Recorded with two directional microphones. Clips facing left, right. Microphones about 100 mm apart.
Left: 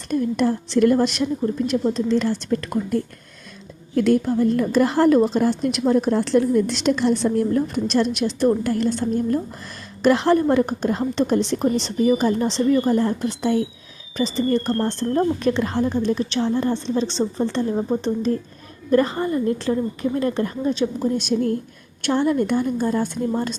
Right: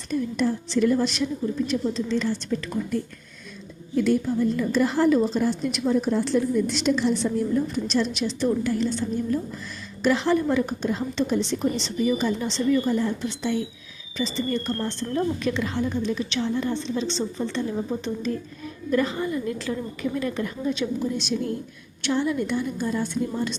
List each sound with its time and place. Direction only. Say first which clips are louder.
0.1 s a woman's voice: left 4 dB; 55° left (ahead or behind)
3.9 s a woman's voice: left 4 dB; 65° left (ahead or behind); by 21.1 s 35° left (ahead or behind)
21.2 s a woman's voice: left 6 dB; 50° left (ahead or behind)